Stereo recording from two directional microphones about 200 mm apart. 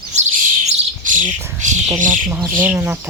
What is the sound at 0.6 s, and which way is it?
Bird, 40° right (ahead or behind).